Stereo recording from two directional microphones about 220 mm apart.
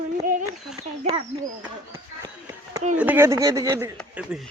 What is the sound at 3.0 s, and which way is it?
Speech, 10° right (ahead or behind).